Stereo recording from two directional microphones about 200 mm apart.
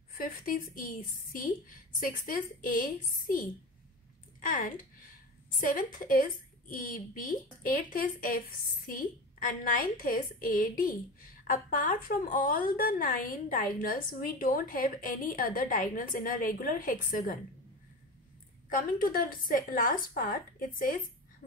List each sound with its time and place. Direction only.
0.1 s a woman's voice: 45° left (ahead or behind)
18.7 s a woman's voice: 45° left (ahead or behind)